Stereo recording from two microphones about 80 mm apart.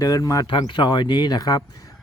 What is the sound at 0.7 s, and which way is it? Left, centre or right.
Speech, left.